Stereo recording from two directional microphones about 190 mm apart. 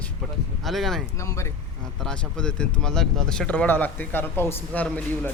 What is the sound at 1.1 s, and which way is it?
Speech, 15° left (ahead or behind).